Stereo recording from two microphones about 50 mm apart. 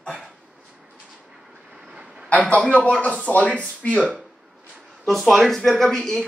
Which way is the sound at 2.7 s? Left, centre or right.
Left.